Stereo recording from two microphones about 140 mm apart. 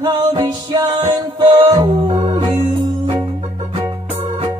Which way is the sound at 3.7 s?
40° right (ahead or behind).